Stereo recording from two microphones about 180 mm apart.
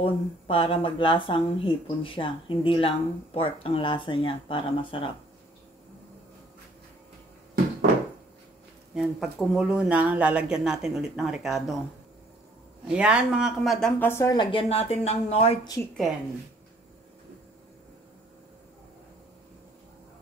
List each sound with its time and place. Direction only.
0.0 s speech: 30° left (ahead or behind)
8.9 s speech: centre (ahead or behind)
12.8 s speech: 5° right (ahead or behind); by 14.3 s 15° left (ahead or behind)
14.3 s speech: 30° left (ahead or behind)